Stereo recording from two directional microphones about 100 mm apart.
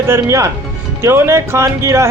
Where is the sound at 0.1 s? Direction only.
30° right (ahead or behind).